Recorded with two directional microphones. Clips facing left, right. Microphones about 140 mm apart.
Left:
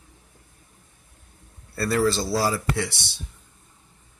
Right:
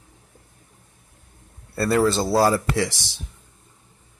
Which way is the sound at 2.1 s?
50° right (ahead or behind).